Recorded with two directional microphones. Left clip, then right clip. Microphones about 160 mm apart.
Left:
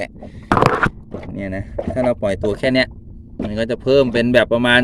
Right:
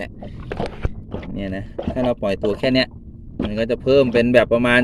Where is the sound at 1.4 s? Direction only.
15° left (ahead or behind).